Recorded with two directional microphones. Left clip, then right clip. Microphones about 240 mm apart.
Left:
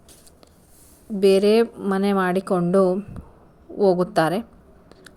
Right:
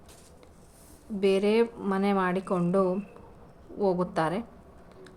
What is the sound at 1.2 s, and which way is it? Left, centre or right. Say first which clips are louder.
A woman's voice: left 8 dB; left.